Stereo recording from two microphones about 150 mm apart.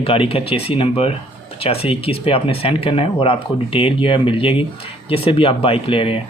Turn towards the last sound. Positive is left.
turn(degrees=35)  # may be behind; listen again after turning